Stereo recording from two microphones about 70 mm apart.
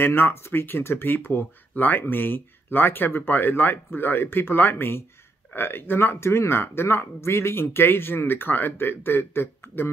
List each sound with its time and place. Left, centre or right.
0.0 s speech: left